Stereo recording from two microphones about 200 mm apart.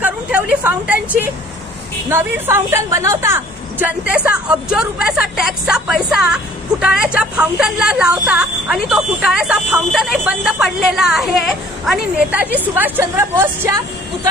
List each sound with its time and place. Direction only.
0.0 s vehicle: 5° right (ahead or behind)
2.0 s a woman's voice: 10° right (ahead or behind)